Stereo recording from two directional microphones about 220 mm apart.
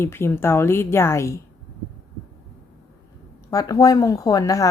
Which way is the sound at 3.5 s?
15° left (ahead or behind).